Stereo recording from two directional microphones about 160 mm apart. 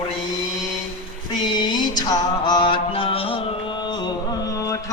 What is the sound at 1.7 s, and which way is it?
Music, 25° left (ahead or behind).